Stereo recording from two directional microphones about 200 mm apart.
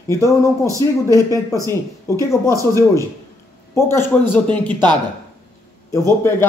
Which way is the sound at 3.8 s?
10° left (ahead or behind).